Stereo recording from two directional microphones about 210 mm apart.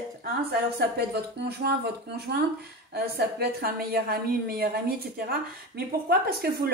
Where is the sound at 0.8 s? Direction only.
50° right (ahead or behind).